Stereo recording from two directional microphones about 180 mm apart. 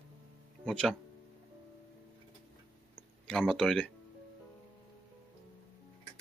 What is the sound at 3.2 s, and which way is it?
Speech, 5° left (ahead or behind).